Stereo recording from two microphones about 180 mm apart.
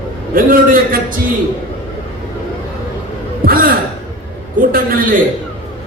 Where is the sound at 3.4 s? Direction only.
55° right (ahead or behind).